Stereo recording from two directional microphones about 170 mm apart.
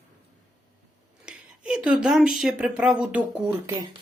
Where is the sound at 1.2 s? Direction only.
5° right (ahead or behind).